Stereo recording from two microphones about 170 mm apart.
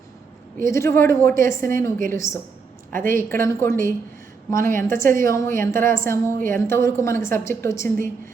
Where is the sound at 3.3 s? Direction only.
15° left (ahead or behind).